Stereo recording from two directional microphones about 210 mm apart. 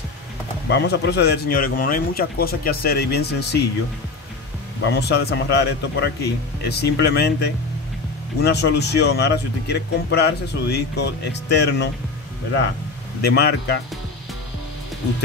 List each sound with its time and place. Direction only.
0.7 s speech: 55° left (ahead or behind)
4.8 s speech: 50° left (ahead or behind)
8.4 s speech: 50° left (ahead or behind)
13.2 s speech: 50° left (ahead or behind)